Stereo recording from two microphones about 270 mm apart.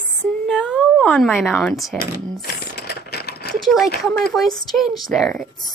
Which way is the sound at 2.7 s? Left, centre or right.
Left.